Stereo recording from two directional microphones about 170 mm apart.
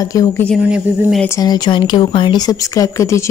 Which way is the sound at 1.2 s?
20° left (ahead or behind).